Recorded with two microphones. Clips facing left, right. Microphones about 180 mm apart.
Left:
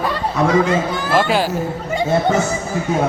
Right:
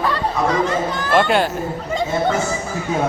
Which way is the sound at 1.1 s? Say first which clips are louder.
Right 1 dB; 5° left (ahead or behind).